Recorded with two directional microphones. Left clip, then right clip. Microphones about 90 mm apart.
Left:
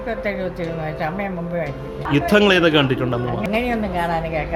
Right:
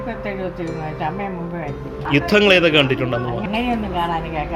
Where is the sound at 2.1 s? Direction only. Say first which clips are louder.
Right 1 dB; 50° left (ahead or behind).